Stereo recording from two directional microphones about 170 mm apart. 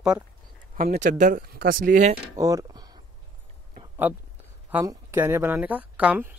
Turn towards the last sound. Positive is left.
turn(degrees=-10)  # may be behind; listen again after turning